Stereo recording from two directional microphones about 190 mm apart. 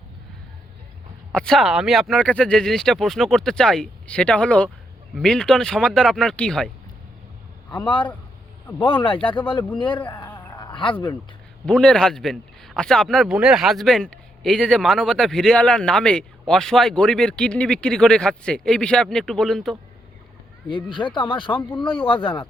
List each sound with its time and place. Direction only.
1.3 s a man's voice: 5° left (ahead or behind)
7.8 s speech: 25° left (ahead or behind)
9.7 s speech: 25° left (ahead or behind)
10.3 s a sound: 25° left (ahead or behind)
11.6 s a man's voice: 5° left (ahead or behind)
20.7 s speech: 25° left (ahead or behind)